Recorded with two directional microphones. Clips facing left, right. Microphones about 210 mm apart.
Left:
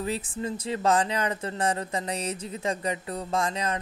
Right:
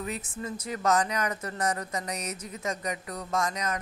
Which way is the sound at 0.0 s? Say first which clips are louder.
Left 5 dB; 30° left (ahead or behind).